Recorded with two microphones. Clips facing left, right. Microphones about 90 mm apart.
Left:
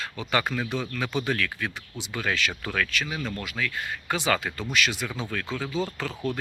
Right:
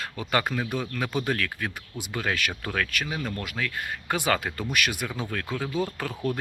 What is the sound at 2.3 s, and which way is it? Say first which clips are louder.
Speech: left 1 dB; 50° right (ahead or behind).